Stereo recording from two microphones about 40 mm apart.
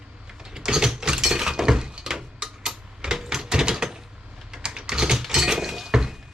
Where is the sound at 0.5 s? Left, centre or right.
Centre.